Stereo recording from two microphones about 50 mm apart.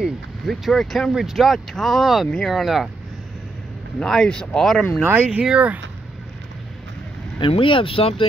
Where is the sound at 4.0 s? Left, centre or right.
Centre.